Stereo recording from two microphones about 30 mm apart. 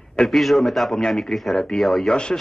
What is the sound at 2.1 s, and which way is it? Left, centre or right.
Speech, left.